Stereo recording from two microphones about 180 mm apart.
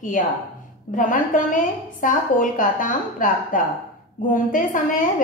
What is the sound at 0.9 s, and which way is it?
A woman's voice, 45° left (ahead or behind).